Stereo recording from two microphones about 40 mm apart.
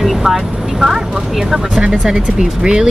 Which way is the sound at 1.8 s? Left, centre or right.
Right.